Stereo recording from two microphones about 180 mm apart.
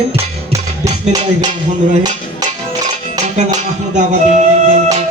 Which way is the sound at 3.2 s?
40° right (ahead or behind).